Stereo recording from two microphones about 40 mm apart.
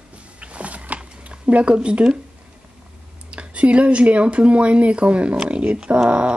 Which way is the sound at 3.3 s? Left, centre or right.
Right.